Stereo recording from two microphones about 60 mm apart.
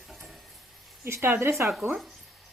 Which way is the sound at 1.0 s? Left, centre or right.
Right.